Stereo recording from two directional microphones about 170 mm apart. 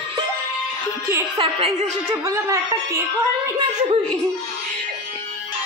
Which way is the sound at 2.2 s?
20° right (ahead or behind).